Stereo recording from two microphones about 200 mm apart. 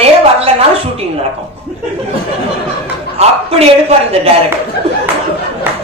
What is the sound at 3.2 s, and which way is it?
A woman's voice, 30° right (ahead or behind).